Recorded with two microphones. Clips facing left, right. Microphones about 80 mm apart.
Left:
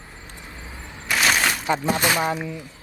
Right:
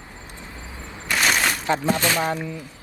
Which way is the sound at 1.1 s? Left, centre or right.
Centre.